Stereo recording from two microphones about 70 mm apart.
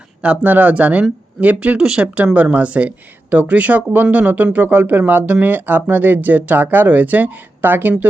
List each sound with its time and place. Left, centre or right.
0.2 s speech: right
1.8 s speech: centre
2.1 s speech: centre